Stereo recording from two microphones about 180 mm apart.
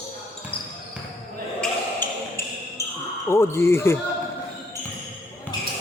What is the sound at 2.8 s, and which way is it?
Basketball bounce, 15° left (ahead or behind).